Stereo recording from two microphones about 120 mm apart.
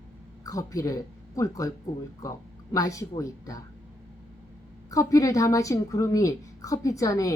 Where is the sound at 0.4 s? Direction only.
30° left (ahead or behind).